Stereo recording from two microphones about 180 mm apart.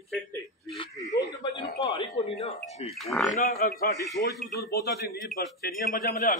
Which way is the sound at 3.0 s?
Centre (ahead or behind).